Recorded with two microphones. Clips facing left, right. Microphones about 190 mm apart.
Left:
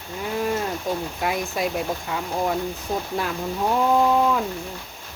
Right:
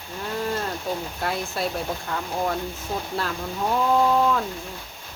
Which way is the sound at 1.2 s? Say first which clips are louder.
Left 2 dB; 15° left (ahead or behind).